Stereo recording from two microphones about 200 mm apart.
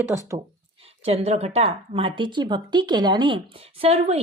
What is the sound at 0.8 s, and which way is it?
Speech, 30° right (ahead or behind).